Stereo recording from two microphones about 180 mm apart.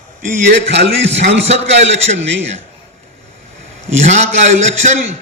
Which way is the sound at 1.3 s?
35° right (ahead or behind).